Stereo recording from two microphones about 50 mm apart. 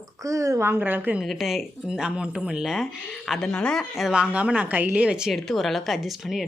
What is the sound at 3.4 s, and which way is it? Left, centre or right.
Speech, centre.